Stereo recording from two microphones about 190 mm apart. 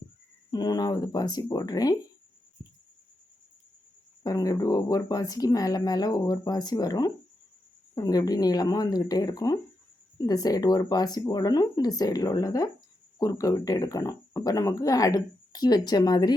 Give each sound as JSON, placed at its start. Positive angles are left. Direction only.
{"t": 0.5, "sound": "speech", "side_deg": 20}
{"t": 4.2, "sound": "speech", "side_deg": 20}